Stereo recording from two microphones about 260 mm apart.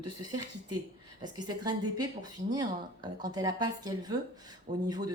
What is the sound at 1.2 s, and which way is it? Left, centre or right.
Speech, centre.